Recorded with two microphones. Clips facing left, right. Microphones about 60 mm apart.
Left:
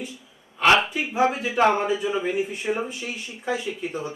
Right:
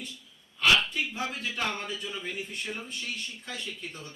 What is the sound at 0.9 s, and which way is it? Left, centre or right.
A man's voice, centre.